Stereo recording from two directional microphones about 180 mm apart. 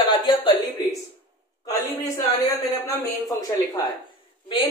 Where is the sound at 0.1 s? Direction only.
25° left (ahead or behind).